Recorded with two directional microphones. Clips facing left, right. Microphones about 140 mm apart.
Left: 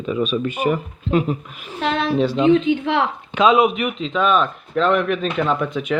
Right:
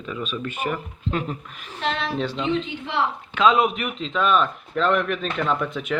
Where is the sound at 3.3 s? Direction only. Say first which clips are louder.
Left 4 dB; 10° left (ahead or behind).